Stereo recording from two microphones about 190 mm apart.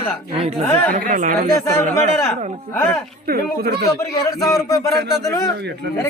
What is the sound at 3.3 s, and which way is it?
Speech, 50° right (ahead or behind).